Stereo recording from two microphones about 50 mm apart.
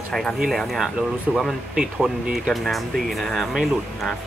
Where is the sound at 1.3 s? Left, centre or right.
Centre.